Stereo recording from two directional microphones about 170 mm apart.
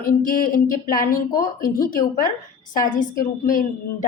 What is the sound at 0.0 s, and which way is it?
Speech, 55° left (ahead or behind).